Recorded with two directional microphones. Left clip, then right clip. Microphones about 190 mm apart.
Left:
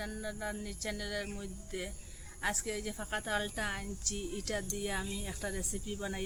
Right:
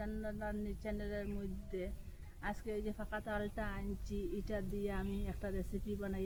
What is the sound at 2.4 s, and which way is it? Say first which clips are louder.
Speech: left 6 dB; 15° left (ahead or behind).